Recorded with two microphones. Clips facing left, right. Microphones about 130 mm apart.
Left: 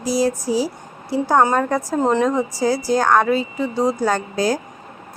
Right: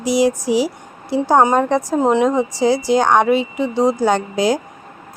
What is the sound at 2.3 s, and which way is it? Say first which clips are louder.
Speech: right 3 dB; 25° right (ahead or behind).